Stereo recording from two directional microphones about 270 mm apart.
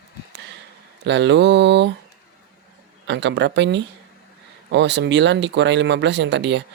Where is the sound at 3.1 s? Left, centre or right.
Right.